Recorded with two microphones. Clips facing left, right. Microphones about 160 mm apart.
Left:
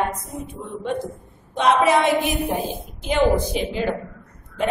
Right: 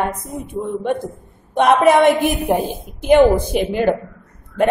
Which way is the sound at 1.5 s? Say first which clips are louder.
Right 5 dB; 55° right (ahead or behind).